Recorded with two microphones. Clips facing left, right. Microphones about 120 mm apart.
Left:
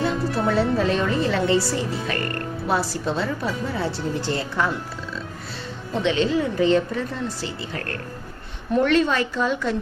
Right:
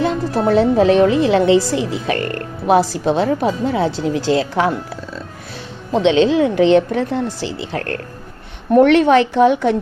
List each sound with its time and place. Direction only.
0.4 s speech: 70° right (ahead or behind)
3.7 s speech: 85° right
5.9 s speech: 80° right
8.7 s speech: 65° right (ahead or behind)